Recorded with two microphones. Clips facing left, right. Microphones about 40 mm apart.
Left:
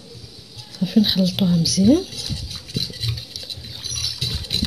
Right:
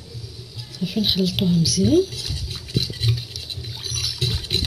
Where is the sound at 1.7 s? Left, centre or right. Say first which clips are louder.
Left 2 dB; left.